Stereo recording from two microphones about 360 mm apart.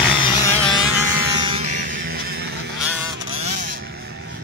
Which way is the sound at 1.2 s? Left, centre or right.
Centre.